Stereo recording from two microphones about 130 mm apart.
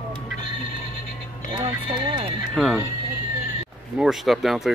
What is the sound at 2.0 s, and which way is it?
Speech, 35° right (ahead or behind).